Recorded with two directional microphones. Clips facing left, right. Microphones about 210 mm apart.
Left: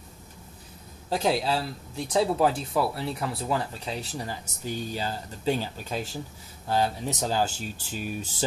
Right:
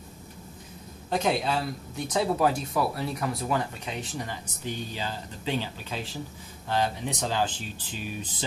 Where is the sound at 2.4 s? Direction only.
30° left (ahead or behind).